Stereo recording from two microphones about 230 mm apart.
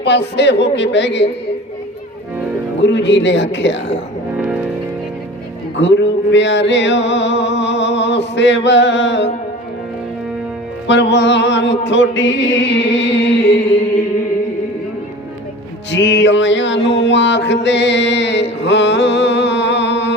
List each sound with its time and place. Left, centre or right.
0.3 s a man's voice: left
2.8 s a man's voice: left
5.8 s a sound: left
10.8 s a man's voice: left
15.9 s music: left